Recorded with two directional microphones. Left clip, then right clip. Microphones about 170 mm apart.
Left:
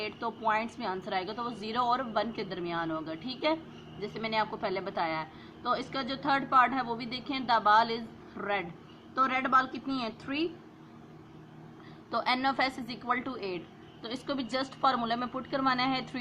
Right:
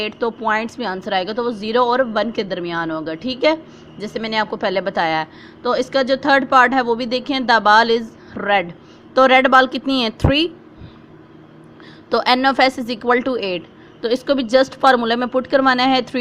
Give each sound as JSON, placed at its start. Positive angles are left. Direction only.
{"t": 0.0, "sound": "a woman's voice", "side_deg": -30}
{"t": 12.1, "sound": "a woman's voice", "side_deg": -35}